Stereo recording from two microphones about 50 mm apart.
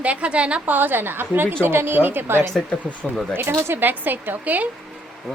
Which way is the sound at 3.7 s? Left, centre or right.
Right.